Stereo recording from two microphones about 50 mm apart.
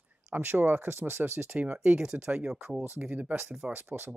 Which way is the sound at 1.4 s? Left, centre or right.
Right.